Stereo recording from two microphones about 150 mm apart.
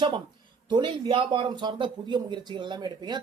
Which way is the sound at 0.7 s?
30° right (ahead or behind).